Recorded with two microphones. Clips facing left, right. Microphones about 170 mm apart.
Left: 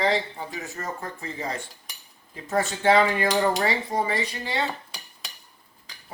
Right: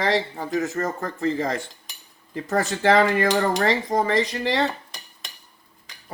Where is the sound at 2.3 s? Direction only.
60° right (ahead or behind).